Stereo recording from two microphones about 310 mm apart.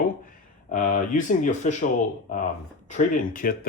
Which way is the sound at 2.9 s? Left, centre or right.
Left.